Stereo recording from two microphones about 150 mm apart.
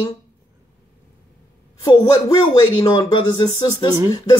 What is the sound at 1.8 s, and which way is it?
Speech, 25° left (ahead or behind).